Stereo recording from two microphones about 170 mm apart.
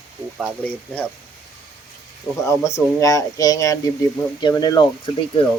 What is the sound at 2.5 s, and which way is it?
Speech, 20° left (ahead or behind).